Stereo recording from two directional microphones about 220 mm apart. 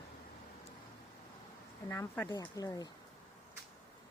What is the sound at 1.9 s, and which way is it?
A woman's voice, 10° left (ahead or behind).